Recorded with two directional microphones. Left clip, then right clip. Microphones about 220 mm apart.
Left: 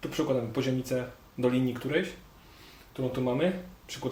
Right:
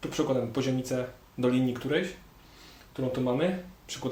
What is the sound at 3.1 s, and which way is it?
Speech, 15° right (ahead or behind).